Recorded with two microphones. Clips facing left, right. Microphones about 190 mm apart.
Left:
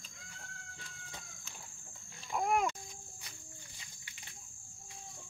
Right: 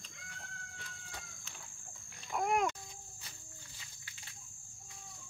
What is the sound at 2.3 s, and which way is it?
Babbling, 5° left (ahead or behind).